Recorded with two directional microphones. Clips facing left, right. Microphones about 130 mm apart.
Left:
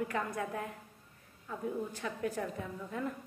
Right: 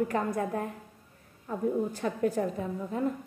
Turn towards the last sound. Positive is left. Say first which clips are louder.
# right 7 dB
turn(degrees=-30)  # may be behind; listen again after turning